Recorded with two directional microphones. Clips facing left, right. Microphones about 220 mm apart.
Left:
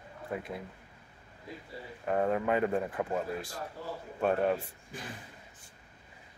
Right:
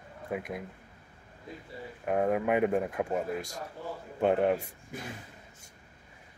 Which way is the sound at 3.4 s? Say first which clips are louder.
Right 2 dB; 45° right (ahead or behind).